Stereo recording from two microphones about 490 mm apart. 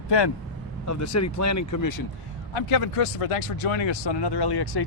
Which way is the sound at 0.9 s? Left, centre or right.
Left.